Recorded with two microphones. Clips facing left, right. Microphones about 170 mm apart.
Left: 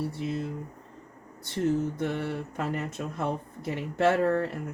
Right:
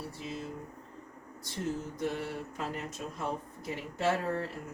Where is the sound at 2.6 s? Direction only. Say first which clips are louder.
Left 7 dB; 60° left (ahead or behind).